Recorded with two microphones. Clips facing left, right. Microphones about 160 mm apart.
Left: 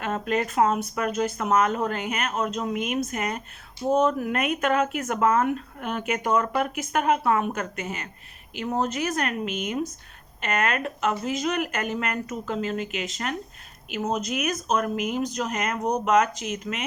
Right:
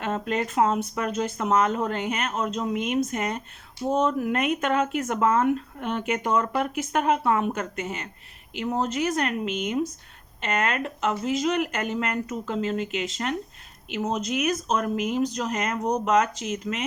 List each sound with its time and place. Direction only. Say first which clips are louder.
0.0 s speech: left 1 dB; 25° right (ahead or behind)